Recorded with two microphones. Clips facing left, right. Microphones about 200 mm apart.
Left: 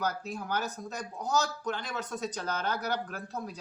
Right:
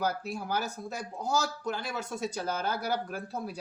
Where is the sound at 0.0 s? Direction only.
10° right (ahead or behind).